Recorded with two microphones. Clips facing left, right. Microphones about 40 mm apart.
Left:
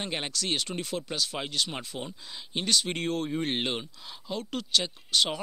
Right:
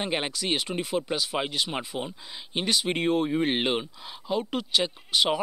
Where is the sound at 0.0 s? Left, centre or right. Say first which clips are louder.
Right 4 dB; centre.